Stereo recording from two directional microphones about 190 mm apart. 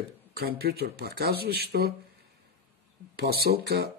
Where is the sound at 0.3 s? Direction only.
55° right (ahead or behind).